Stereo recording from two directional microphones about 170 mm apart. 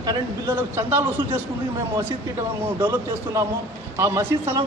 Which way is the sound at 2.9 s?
15° right (ahead or behind).